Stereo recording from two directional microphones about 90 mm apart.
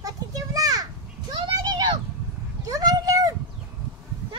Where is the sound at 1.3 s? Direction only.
50° right (ahead or behind).